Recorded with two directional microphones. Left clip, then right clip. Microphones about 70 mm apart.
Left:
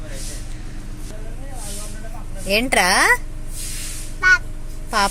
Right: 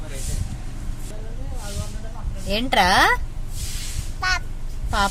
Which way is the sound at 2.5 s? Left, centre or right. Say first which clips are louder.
Left 2 dB; left.